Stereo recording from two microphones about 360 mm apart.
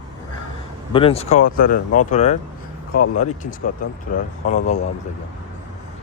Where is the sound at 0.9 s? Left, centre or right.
Centre.